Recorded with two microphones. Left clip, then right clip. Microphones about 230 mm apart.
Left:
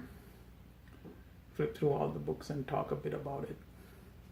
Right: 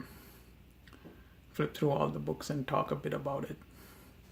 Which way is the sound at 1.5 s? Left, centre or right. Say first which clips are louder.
Right 1 dB; right.